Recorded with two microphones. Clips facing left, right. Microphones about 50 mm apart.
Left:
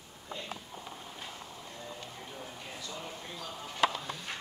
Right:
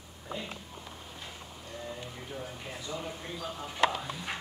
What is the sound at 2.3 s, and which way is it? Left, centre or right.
Music, centre.